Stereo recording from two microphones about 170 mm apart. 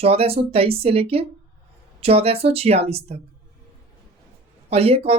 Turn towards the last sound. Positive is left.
turn(degrees=-35)  # may be behind; listen again after turning